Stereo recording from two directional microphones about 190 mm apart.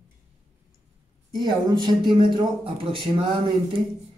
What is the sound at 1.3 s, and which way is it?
A man's voice, 25° right (ahead or behind).